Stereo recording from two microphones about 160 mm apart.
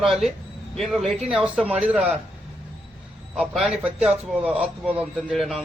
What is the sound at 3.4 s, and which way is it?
Speech, centre (ahead or behind).